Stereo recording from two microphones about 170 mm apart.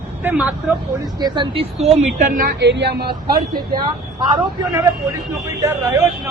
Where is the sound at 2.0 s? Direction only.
45° right (ahead or behind).